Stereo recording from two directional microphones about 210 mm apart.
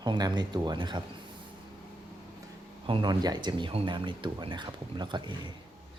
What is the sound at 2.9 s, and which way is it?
Speech, 20° right (ahead or behind).